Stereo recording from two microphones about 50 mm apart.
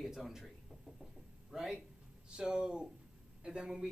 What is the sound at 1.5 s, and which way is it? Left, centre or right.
Speech, centre.